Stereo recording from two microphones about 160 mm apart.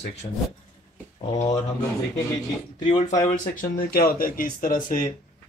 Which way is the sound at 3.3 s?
60° left (ahead or behind).